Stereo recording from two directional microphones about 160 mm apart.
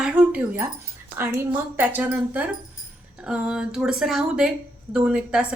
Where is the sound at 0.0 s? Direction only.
5° right (ahead or behind).